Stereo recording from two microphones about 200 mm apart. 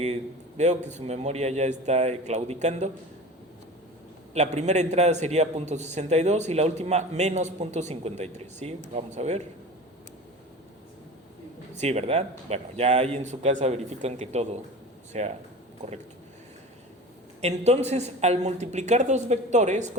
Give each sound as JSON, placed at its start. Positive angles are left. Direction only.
{"t": 0.0, "sound": "a man's voice", "side_deg": -35}
{"t": 4.4, "sound": "a man's voice", "side_deg": -35}
{"t": 11.8, "sound": "a man's voice", "side_deg": -35}
{"t": 17.4, "sound": "a man's voice", "side_deg": -35}